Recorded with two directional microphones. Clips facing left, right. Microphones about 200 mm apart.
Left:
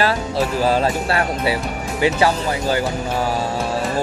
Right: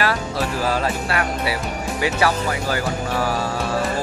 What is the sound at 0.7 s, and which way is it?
Speech, 30° left (ahead or behind).